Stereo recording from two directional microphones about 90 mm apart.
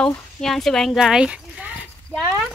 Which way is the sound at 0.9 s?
5° right (ahead or behind).